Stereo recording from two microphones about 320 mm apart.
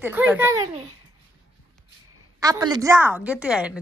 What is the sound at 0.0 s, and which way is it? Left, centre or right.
Speech, centre.